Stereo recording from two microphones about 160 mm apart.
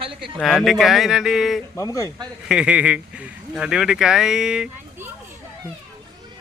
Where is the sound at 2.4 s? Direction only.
5° right (ahead or behind).